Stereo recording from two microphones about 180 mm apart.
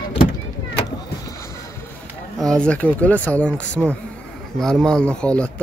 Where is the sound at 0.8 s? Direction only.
20° left (ahead or behind).